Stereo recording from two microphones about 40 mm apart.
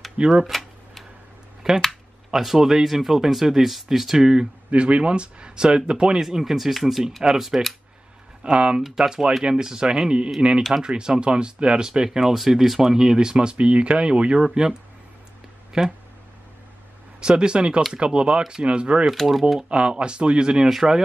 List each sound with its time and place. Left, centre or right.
0.2 s speech: right
0.5 s a sound: centre
1.8 s speech: centre
4.6 s speech: right
6.2 s speech: centre
8.5 s speech: right
8.9 s speech: centre
12.4 s speech: centre; by 14.4 s right
14.4 s speech: centre
17.2 s speech: right
18.7 s speech: right
19.0 s speech: centre
19.7 s speech: right